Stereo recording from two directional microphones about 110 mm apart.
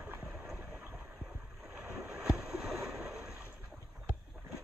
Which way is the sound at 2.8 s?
5° right (ahead or behind).